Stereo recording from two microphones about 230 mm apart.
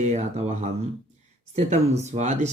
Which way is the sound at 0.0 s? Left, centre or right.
Right.